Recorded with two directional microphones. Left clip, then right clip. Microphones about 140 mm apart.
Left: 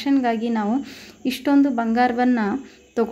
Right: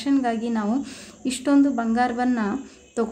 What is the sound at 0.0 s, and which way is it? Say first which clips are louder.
Speech: left 2 dB; 20° left (ahead or behind).